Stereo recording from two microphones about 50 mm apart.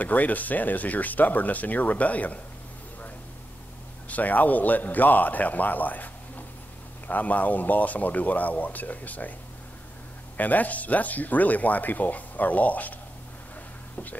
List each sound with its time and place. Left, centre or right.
0.0 s speech: left
4.1 s speech: left
10.3 s speech: left